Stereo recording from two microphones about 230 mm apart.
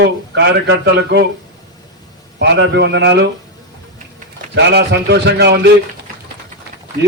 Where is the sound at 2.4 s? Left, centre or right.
Right.